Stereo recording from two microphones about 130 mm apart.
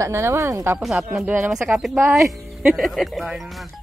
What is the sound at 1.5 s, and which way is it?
Speech, centre (ahead or behind).